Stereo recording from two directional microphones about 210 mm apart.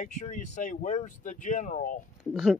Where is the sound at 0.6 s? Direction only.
35° left (ahead or behind).